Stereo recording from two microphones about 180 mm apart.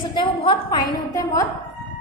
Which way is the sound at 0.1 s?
25° left (ahead or behind).